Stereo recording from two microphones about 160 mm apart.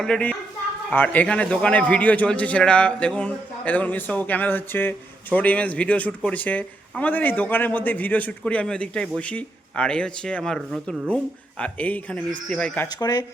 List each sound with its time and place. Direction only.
0.0 s a man's voice: 5° left (ahead or behind)
12.9 s speech: 25° left (ahead or behind)